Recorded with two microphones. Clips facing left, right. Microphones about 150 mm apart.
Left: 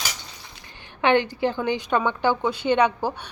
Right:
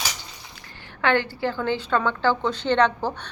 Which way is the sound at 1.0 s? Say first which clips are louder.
Left 2 dB; 20° left (ahead or behind).